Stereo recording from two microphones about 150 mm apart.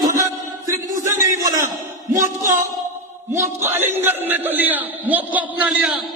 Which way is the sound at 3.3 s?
15° right (ahead or behind).